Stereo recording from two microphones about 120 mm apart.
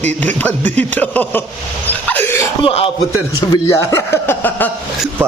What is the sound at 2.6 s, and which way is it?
Speech, 50° left (ahead or behind).